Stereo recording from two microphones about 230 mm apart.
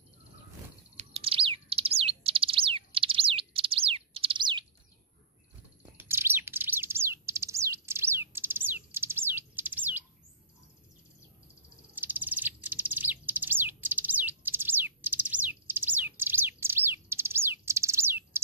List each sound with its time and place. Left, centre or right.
0.9 s bird: right
5.9 s bird: centre
11.9 s bird: centre